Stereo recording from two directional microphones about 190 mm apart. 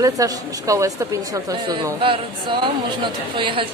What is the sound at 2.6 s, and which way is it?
Speech, 25° right (ahead or behind).